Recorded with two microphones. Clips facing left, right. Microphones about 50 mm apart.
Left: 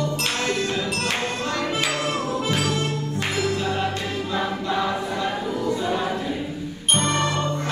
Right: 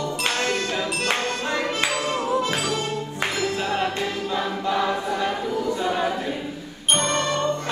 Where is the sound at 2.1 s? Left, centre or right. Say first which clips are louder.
Right 2 dB; right.